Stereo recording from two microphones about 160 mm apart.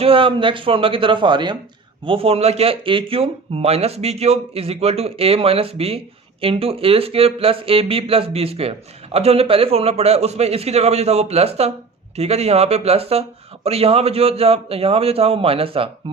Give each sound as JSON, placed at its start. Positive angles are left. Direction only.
{"t": 0.0, "sound": "speech", "side_deg": -35}